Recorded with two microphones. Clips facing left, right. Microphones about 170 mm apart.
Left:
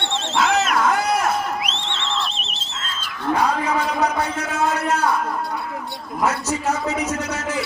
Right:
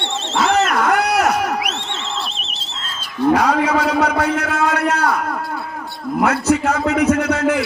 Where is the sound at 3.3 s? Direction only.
80° right.